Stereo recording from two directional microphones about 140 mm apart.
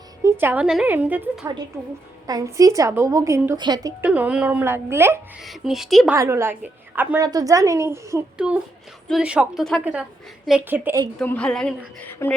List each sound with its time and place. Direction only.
0.2 s a woman's voice: 15° right (ahead or behind)
2.2 s speech: 25° right (ahead or behind)
4.0 s a woman's voice: 10° right (ahead or behind)
5.4 s speech: centre (ahead or behind)
6.1 s a woman's voice: 20° right (ahead or behind)
7.2 s speech: 25° right (ahead or behind)
8.4 s a woman's voice: 5° right (ahead or behind)
11.2 s speech: 5° left (ahead or behind)
12.2 s speech: 20° left (ahead or behind)